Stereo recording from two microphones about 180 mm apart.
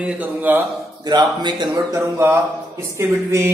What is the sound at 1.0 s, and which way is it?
Speech, 25° right (ahead or behind).